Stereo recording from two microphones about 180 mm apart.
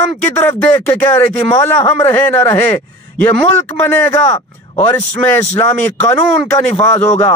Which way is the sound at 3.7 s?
10° left (ahead or behind).